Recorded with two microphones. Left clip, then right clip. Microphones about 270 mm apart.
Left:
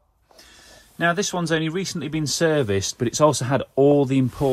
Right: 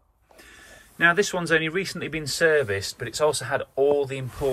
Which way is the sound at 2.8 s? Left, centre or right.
Left.